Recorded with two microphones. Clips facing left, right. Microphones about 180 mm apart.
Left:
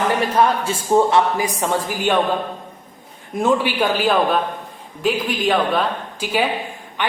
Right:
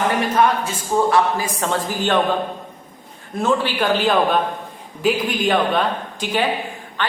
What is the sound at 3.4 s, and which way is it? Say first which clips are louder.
A man's voice: left 2 dB; 15° left (ahead or behind).